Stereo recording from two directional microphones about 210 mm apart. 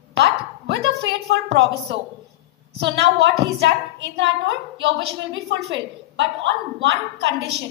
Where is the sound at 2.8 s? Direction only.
60° right (ahead or behind).